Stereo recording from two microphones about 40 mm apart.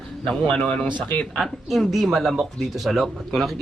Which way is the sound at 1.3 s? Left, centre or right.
Centre.